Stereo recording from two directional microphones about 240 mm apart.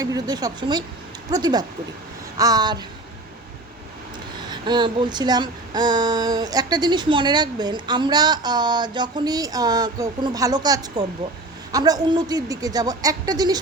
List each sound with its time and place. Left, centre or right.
0.0 s child singing: centre
4.4 s child singing: centre